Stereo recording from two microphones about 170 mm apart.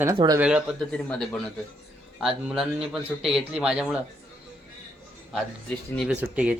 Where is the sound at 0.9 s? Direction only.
5° left (ahead or behind).